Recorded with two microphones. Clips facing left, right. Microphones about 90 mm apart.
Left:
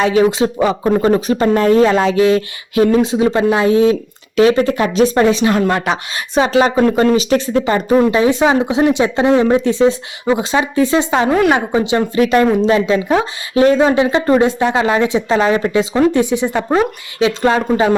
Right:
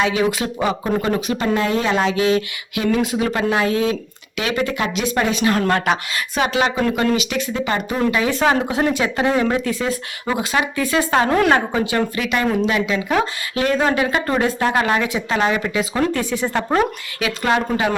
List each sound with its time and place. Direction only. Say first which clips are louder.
0.0 s speech: left 6 dB; 35° left (ahead or behind)
8.3 s speech: left 5 dB; 20° left (ahead or behind)
11.3 s a woman's voice: left 5 dB; 5° left (ahead or behind)
11.5 s speech: left 3 dB; 15° left (ahead or behind)
12.2 s speech: left 7 dB; 40° left (ahead or behind); by 16.8 s 15° left (ahead or behind)
17.2 s speech: left 6 dB; 30° left (ahead or behind)